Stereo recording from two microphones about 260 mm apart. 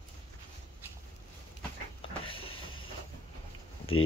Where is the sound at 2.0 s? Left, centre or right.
Left.